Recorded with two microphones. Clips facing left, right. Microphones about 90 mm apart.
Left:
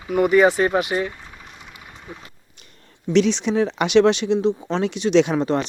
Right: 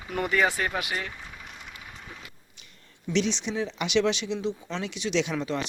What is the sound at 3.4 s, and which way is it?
Speech, 65° left (ahead or behind).